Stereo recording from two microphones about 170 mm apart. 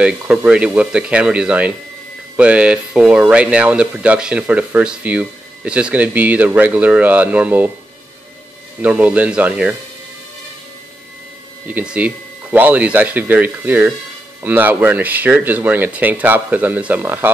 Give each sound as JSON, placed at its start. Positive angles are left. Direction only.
{"t": 0.0, "sound": "speech", "side_deg": -5}
{"t": 8.8, "sound": "speech", "side_deg": -10}
{"t": 11.6, "sound": "speech", "side_deg": -5}